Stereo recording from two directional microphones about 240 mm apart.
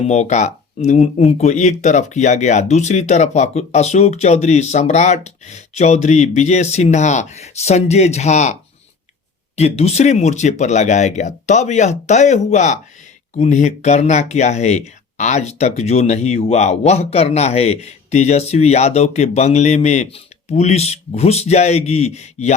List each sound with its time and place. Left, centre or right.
0.1 s speech: left
9.6 s speech: left